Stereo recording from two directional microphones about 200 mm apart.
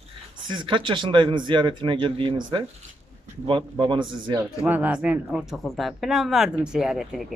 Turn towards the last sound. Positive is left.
turn(degrees=0)  # may be behind; listen again after turning